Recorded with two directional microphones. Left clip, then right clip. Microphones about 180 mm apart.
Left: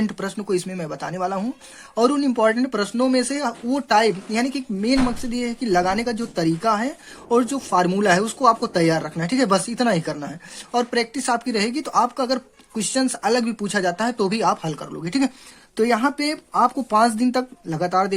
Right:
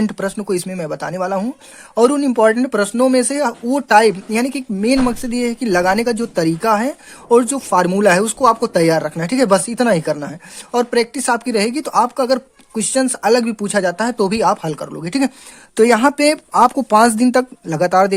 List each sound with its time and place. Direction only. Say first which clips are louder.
0.0 s speech: right 6 dB; 35° right (ahead or behind)